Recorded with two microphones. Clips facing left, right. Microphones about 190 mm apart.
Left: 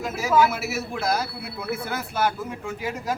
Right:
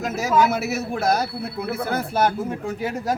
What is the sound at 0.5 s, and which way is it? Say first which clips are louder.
Speech: right 5 dB; 40° right (ahead or behind).